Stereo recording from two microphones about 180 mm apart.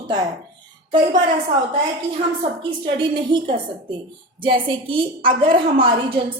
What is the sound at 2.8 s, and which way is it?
A woman's voice, 25° right (ahead or behind).